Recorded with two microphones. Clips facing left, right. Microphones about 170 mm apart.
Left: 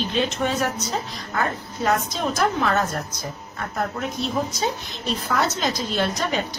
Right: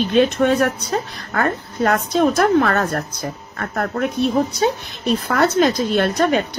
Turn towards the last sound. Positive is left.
turn(degrees=-55)  # may be behind; listen again after turning